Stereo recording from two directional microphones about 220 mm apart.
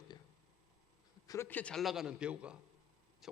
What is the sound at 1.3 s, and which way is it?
A man's voice, 10° left (ahead or behind).